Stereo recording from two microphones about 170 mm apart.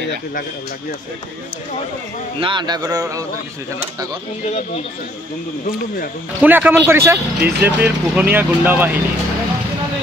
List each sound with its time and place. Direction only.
2.4 s a man's voice: 25° right (ahead or behind)
6.4 s speech: 10° right (ahead or behind)